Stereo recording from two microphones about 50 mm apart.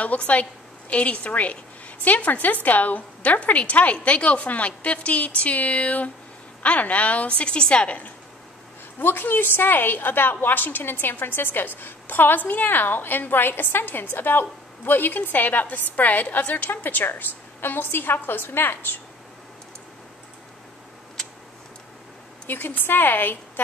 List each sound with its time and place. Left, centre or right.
0.0 s a woman's voice: left
9.0 s a woman's voice: left
22.5 s a woman's voice: left